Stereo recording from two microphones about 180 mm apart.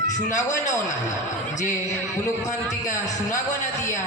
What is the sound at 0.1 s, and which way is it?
Speech, 45° left (ahead or behind).